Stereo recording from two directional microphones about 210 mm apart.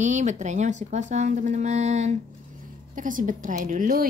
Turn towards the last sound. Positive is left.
turn(degrees=-40)  # may be behind; listen again after turning